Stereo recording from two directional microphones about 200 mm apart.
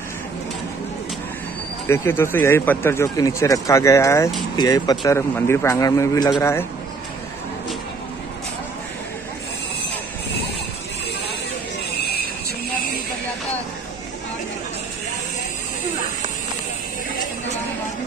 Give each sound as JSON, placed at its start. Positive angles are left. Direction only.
{"t": 1.9, "sound": "speech", "side_deg": 10}